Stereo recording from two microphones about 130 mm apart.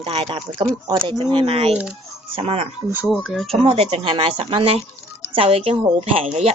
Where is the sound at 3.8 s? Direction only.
45° right (ahead or behind).